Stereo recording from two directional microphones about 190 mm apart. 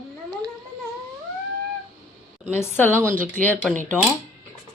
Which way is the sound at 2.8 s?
10° left (ahead or behind).